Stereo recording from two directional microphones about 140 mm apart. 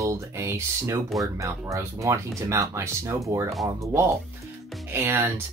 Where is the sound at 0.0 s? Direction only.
20° right (ahead or behind).